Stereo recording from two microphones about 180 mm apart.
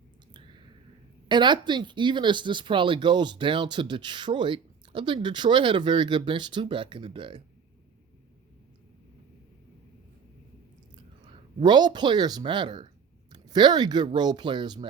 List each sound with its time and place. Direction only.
1.3 s speech: 25° right (ahead or behind)
11.6 s speech: 25° right (ahead or behind)